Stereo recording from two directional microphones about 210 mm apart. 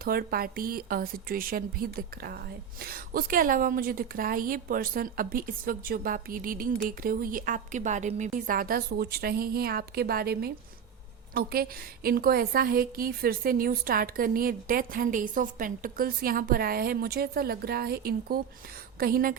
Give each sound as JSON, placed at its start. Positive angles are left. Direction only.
{"t": 0.0, "sound": "a woman's voice", "side_deg": -45}